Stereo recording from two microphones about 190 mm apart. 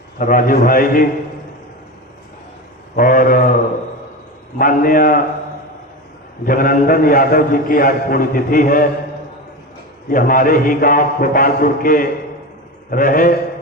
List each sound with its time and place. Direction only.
0.2 s a man's voice: 45° left (ahead or behind)
2.9 s a man's voice: 45° left (ahead or behind)
4.5 s a man's voice: 50° left (ahead or behind)
6.4 s a man's voice: 45° left (ahead or behind)
10.1 s a man's voice: 45° left (ahead or behind)